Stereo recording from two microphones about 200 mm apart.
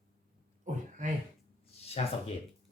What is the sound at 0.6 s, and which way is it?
Throat clearing, 40° right (ahead or behind).